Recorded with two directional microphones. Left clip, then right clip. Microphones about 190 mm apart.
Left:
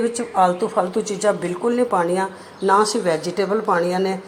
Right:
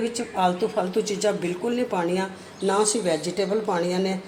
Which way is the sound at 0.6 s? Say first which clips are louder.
Left 3 dB; 15° left (ahead or behind).